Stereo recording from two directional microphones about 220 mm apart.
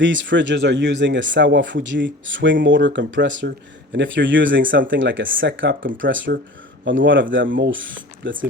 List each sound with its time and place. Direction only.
0.0 s speech: 55° right (ahead or behind)